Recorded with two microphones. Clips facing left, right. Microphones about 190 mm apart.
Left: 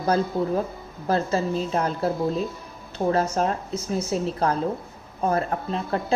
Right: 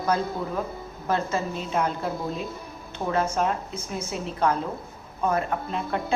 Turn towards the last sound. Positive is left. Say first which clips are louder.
# left 2 dB
turn(degrees=35)  # may be behind; listen again after turning